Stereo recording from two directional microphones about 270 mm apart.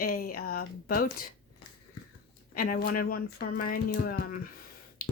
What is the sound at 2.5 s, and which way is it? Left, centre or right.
Speech, left.